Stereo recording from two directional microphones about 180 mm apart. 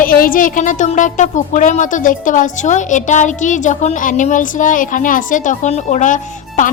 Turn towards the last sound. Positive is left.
turn(degrees=45)  # may be behind; listen again after turning